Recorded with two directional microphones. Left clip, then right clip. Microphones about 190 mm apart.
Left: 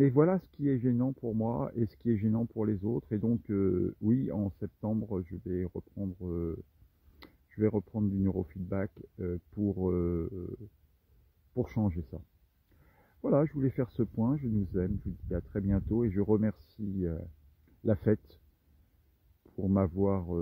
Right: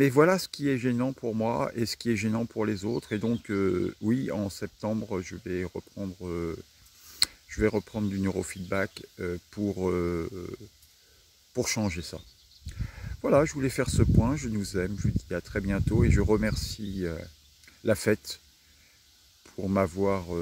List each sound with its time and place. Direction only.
0.0 s speech: 5° right (ahead or behind)
2.8 s speech: 15° right (ahead or behind)
3.1 s speech: 5° right (ahead or behind)
11.5 s speech: 5° right (ahead or behind)
13.2 s speech: 5° right (ahead or behind)
19.4 s speech: 5° right (ahead or behind)